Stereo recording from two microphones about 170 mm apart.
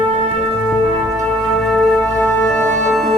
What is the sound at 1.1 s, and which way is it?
Music, 5° left (ahead or behind).